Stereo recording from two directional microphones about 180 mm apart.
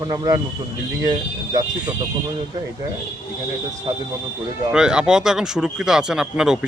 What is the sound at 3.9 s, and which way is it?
Speech, 20° right (ahead or behind).